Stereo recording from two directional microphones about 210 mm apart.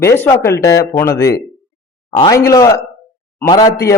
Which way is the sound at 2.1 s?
15° left (ahead or behind).